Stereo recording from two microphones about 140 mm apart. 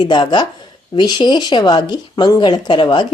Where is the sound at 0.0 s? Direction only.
30° left (ahead or behind).